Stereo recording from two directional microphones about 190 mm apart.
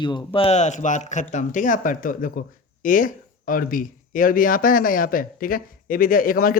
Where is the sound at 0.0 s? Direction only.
25° left (ahead or behind).